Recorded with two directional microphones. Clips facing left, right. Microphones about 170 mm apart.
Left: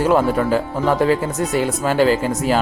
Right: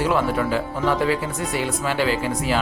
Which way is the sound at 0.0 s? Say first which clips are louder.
Left 5 dB; 45° left (ahead or behind).